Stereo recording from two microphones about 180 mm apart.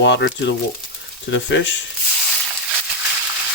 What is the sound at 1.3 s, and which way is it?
Speech, 90° left.